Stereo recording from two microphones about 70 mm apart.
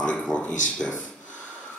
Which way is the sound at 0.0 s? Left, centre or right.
Centre.